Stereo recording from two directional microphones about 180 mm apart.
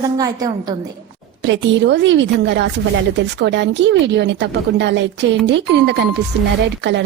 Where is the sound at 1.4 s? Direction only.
85° right.